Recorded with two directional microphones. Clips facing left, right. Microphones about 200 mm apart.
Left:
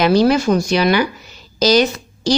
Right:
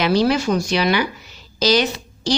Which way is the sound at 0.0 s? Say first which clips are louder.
Left 4 dB; 45° left (ahead or behind).